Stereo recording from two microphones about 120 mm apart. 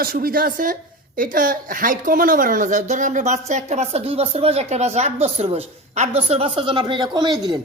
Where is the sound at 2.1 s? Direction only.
90° right.